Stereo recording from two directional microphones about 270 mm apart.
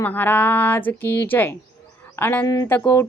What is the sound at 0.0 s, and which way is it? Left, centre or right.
Mantra, centre.